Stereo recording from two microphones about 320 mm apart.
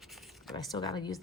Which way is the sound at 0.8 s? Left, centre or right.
Centre.